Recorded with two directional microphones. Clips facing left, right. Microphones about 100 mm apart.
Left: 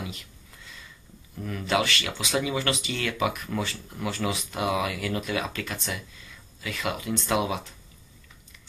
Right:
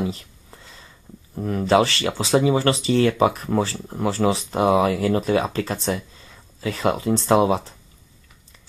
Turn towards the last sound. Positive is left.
turn(degrees=-35)  # may be behind; listen again after turning